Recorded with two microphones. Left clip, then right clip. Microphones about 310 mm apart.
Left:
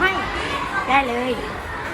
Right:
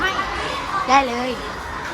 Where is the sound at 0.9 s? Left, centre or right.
Centre.